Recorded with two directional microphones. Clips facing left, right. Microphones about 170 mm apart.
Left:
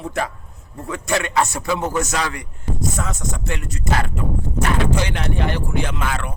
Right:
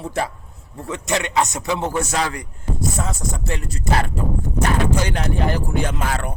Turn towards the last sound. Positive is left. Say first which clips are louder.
# right 1 dB
turn(degrees=-40)  # may be behind; listen again after turning